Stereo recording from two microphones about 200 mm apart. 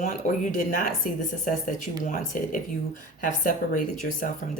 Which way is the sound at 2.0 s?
40° left (ahead or behind).